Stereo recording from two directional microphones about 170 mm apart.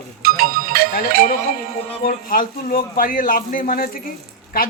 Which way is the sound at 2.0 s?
55° left (ahead or behind).